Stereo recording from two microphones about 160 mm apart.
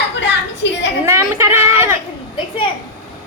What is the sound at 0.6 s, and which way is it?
Speech, 90° left.